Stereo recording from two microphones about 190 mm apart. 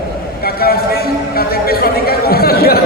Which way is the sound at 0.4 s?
55° left (ahead or behind).